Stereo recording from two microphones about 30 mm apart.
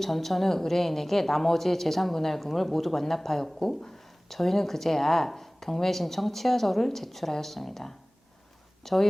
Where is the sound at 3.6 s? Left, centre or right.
Left.